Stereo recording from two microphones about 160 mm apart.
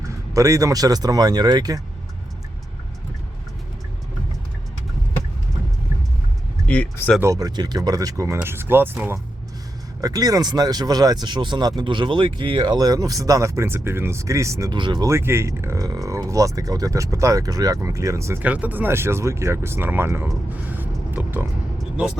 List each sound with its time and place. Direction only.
0.3 s speech: 20° right (ahead or behind)
6.7 s speech: 10° left (ahead or behind)
7.2 s speech: 20° right (ahead or behind)
15.1 s speech: 15° right (ahead or behind)
21.8 s vehicle: 5° right (ahead or behind)